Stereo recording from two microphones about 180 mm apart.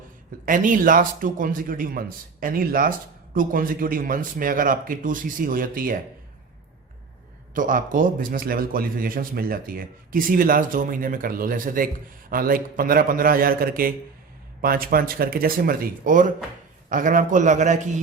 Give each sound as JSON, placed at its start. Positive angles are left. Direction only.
{"t": 0.4, "sound": "a man's voice", "side_deg": -45}
{"t": 7.5, "sound": "a man's voice", "side_deg": -50}